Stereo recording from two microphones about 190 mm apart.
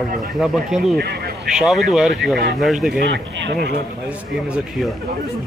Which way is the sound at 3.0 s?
65° right (ahead or behind).